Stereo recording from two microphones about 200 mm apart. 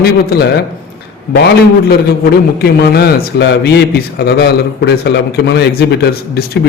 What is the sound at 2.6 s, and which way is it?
A man's voice, 55° left (ahead or behind).